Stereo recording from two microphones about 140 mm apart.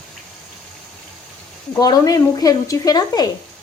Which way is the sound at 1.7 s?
25° left (ahead or behind).